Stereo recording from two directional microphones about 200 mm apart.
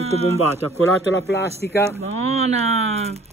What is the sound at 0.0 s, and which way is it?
Speech, 30° right (ahead or behind).